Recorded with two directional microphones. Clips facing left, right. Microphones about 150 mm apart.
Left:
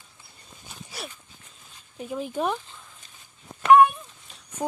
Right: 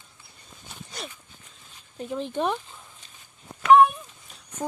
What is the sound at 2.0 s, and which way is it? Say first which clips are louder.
Speech: right 1 dB; 5° left (ahead or behind).